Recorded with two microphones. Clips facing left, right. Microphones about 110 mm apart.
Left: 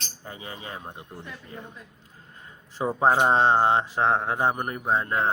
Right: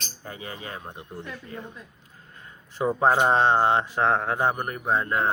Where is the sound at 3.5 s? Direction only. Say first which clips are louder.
Even; 25° left (ahead or behind).